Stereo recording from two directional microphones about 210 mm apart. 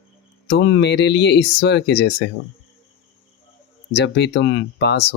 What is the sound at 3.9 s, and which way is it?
Speech, 55° left (ahead or behind).